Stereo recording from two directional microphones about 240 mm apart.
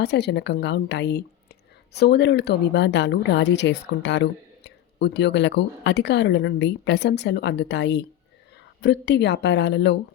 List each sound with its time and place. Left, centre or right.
0.0 s a woman's voice: left